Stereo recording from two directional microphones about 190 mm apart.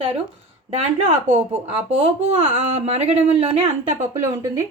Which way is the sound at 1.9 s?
30° right (ahead or behind).